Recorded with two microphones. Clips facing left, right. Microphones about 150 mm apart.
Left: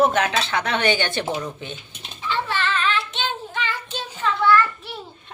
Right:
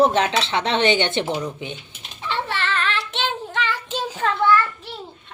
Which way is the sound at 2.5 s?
70° right (ahead or behind).